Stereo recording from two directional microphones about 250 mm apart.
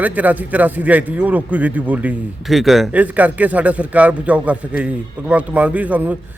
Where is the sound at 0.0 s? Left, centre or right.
Centre.